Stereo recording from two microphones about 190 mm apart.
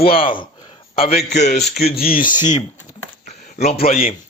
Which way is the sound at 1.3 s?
40° left (ahead or behind).